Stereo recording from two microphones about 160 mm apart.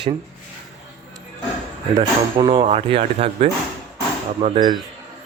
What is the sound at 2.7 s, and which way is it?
Speech, 45° right (ahead or behind).